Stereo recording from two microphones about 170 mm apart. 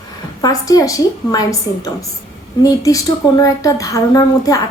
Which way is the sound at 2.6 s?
20° left (ahead or behind).